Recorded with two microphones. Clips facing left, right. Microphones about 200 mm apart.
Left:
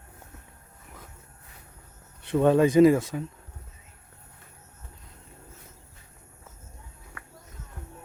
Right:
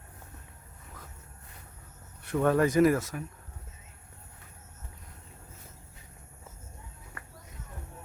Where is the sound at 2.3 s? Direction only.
20° left (ahead or behind).